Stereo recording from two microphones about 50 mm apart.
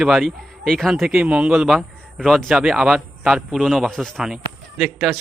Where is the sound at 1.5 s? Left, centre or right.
Centre.